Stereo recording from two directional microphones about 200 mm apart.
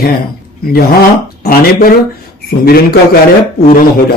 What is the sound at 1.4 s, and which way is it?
Speech, 50° left (ahead or behind).